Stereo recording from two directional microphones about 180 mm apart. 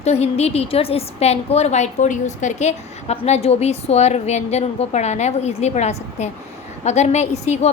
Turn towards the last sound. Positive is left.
turn(degrees=40)  # may be behind; listen again after turning